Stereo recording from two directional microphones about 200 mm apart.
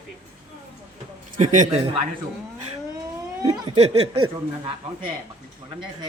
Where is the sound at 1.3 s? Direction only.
40° right (ahead or behind).